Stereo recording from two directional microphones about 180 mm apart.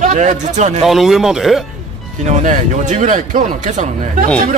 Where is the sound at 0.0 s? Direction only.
40° right (ahead or behind).